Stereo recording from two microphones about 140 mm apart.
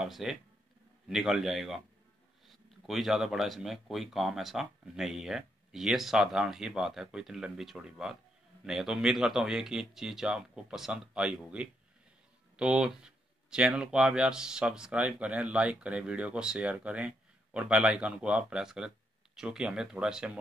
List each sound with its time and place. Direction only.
0.0 s speech: 5° right (ahead or behind)